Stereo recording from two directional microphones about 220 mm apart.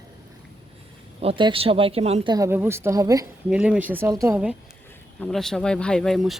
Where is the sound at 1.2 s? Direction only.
25° right (ahead or behind).